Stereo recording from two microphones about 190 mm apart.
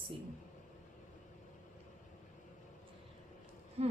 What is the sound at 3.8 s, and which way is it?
Speech, 30° right (ahead or behind).